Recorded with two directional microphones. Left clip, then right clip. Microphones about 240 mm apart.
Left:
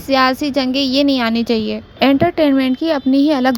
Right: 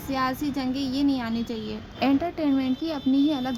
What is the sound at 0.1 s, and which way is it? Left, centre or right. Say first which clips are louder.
A woman's voice: left 13 dB; left.